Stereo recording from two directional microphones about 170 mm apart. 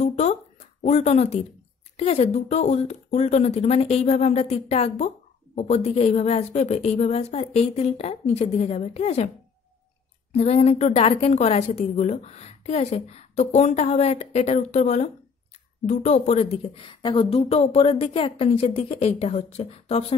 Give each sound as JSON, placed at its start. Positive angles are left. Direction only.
{"t": 0.0, "sound": "a sound", "side_deg": 40}
{"t": 0.8, "sound": "a woman's voice", "side_deg": 40}
{"t": 10.3, "sound": "a woman's voice", "side_deg": 40}